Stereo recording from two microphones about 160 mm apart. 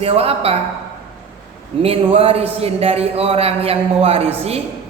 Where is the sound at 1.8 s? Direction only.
35° right (ahead or behind).